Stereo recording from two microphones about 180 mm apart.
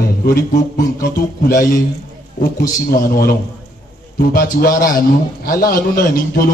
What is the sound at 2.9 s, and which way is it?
A man's voice, 55° left (ahead or behind).